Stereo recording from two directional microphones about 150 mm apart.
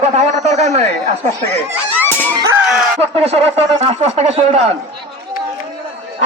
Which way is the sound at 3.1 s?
40° right (ahead or behind).